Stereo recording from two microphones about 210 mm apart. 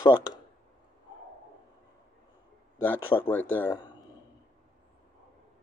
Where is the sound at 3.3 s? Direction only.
10° left (ahead or behind).